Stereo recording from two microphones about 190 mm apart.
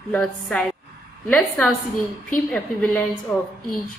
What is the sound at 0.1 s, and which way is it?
A woman's voice, 5° left (ahead or behind).